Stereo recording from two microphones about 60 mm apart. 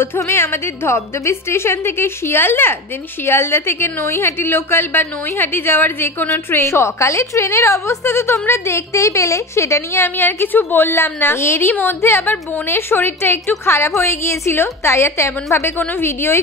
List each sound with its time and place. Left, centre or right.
0.0 s a woman's voice: left
6.5 s a woman's voice: left
10.0 s a woman's voice: left